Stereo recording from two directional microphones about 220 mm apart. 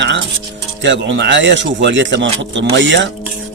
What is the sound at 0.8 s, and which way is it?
A man's voice, 55° right (ahead or behind).